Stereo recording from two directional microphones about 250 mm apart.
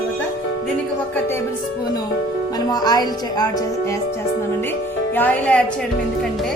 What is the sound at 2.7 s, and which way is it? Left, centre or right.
Music, centre.